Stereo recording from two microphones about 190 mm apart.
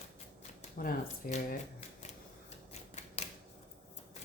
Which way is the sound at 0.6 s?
45° left (ahead or behind).